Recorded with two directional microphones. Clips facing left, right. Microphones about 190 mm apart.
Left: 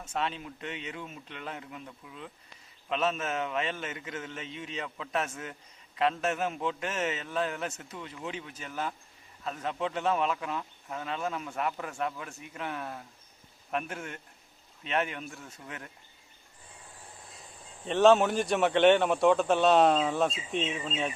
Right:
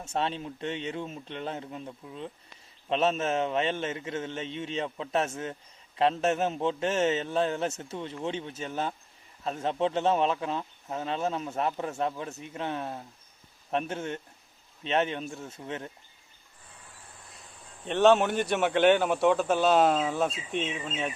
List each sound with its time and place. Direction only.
0.0 s speech: 30° right (ahead or behind)
17.8 s a man's voice: centre (ahead or behind)